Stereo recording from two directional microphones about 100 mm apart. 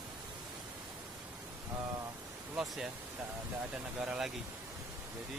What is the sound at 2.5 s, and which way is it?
Speech, 5° right (ahead or behind).